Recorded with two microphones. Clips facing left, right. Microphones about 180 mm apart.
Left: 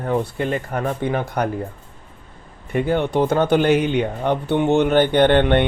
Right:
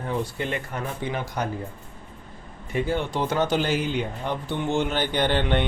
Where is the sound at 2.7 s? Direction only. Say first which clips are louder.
Left 6 dB; 60° left (ahead or behind).